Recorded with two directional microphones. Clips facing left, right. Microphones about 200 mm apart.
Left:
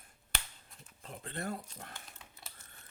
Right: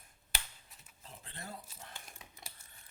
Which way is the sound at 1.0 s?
60° left (ahead or behind).